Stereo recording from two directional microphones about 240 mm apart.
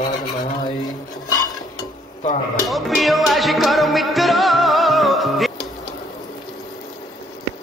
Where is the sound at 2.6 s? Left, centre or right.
Centre.